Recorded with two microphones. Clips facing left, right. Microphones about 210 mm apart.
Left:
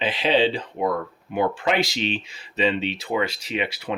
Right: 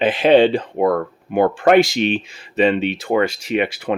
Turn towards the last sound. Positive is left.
turn(degrees=-55)  # may be behind; listen again after turning